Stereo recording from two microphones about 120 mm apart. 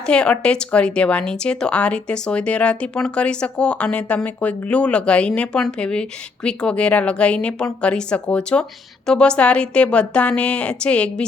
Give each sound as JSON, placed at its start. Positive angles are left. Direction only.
{"t": 0.0, "sound": "speech", "side_deg": 5}